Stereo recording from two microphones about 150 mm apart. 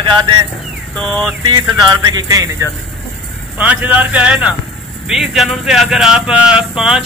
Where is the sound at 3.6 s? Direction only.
10° right (ahead or behind).